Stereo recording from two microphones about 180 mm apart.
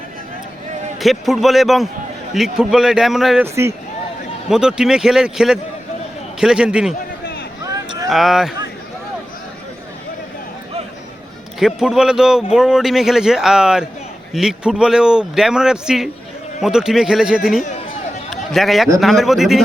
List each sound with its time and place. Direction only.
0.9 s speech: centre (ahead or behind)
3.4 s a man's voice: 15° right (ahead or behind)
4.4 s speech: 5° right (ahead or behind)
7.6 s a sound: 20° right (ahead or behind)
8.1 s speech: centre (ahead or behind)
11.6 s speech: 5° right (ahead or behind)